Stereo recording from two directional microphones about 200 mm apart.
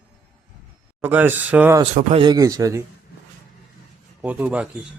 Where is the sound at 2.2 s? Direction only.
20° right (ahead or behind).